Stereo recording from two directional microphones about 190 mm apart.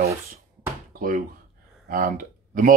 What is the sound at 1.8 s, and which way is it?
Speech, 50° right (ahead or behind).